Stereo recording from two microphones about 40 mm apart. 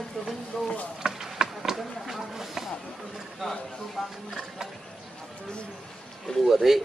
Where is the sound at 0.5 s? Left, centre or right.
Centre.